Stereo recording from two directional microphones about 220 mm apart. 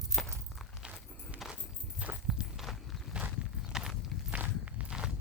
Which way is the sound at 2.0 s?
5° right (ahead or behind).